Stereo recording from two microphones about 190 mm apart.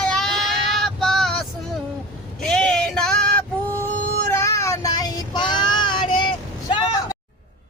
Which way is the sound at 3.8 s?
15° left (ahead or behind).